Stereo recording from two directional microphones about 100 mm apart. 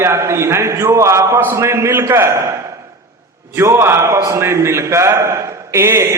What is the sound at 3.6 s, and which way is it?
A man's voice, 25° right (ahead or behind).